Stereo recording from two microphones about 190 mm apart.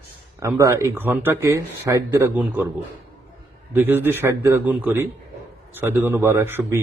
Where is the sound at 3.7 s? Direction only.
10° right (ahead or behind).